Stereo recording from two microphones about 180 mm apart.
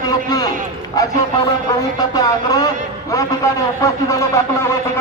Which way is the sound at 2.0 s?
20° left (ahead or behind).